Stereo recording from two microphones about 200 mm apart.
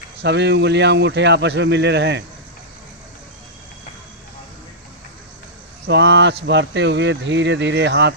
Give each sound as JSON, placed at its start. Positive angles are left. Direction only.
{"t": 0.2, "sound": "speech", "side_deg": -60}
{"t": 5.8, "sound": "speech", "side_deg": -60}